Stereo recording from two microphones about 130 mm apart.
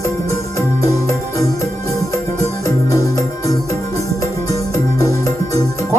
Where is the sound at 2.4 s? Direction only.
25° left (ahead or behind).